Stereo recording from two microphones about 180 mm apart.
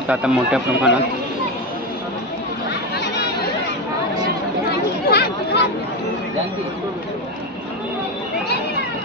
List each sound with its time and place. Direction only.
0.1 s a man's voice: 5° right (ahead or behind)
3.0 s chatter: 60° left (ahead or behind)
5.0 s chatter: 60° left (ahead or behind)